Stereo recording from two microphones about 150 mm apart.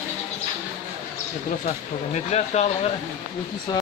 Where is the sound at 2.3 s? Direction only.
45° left (ahead or behind).